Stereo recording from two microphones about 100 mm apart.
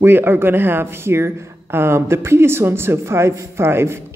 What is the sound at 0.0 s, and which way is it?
Speech, 20° right (ahead or behind).